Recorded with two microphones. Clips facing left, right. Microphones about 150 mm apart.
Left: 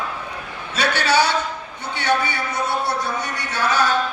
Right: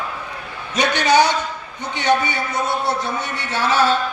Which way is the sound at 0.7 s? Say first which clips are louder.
Right 3 dB; 20° right (ahead or behind).